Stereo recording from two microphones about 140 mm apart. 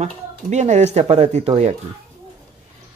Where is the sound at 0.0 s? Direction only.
55° right (ahead or behind).